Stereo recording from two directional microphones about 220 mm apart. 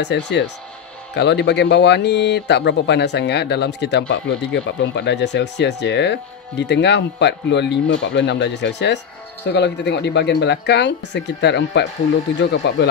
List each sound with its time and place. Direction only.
0.0 s speech: 50° left (ahead or behind)